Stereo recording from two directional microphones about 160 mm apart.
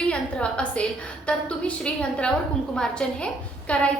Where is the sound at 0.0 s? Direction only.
5° left (ahead or behind).